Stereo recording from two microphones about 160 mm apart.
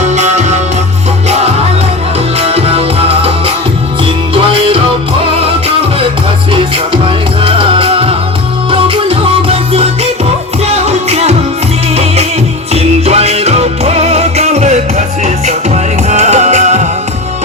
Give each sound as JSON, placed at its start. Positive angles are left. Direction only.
{"t": 0.0, "sound": "music", "side_deg": -45}
{"t": 2.4, "sound": "music", "side_deg": -40}
{"t": 7.4, "sound": "music", "side_deg": -35}
{"t": 12.7, "sound": "music", "side_deg": -40}